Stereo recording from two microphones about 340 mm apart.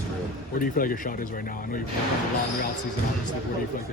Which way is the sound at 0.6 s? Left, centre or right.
Left.